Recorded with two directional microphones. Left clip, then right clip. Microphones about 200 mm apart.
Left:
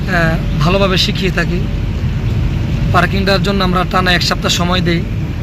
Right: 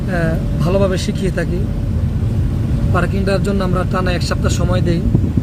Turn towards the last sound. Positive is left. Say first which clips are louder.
# left 5 dB
turn(degrees=-10)  # may be behind; listen again after turning